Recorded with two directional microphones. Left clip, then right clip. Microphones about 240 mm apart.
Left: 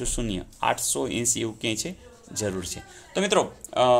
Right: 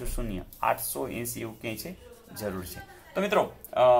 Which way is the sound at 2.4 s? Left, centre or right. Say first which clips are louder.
Left 5 dB; left.